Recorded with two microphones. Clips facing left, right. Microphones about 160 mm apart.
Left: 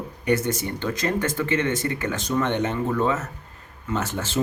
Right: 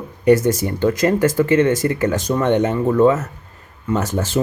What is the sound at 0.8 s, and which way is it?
Speech, 40° right (ahead or behind).